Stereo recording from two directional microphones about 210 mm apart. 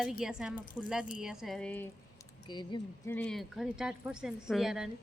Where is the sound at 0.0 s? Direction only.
Centre (ahead or behind).